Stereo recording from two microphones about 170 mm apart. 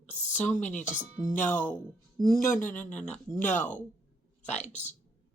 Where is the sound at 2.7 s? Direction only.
10° left (ahead or behind).